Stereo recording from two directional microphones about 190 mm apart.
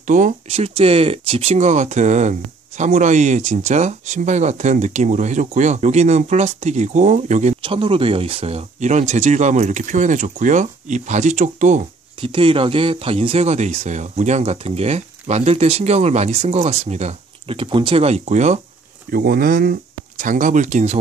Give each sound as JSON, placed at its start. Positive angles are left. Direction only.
{"t": 0.0, "sound": "speech", "side_deg": -40}
{"t": 12.2, "sound": "speech", "side_deg": -25}
{"t": 19.0, "sound": "speech", "side_deg": -50}